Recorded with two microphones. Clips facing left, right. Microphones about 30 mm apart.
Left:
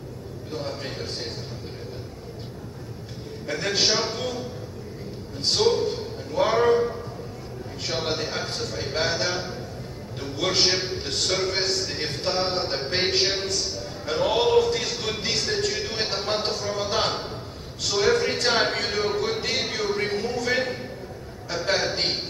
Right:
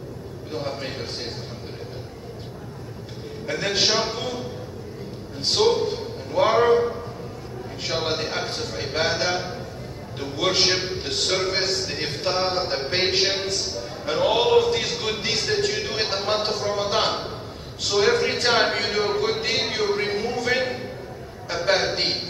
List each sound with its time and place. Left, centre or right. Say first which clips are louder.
0.5 s a man's voice: right 2 dB; centre
3.4 s a man's voice: right 1 dB; centre